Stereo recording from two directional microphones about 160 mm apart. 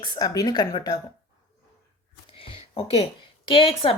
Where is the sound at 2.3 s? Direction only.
35° left (ahead or behind).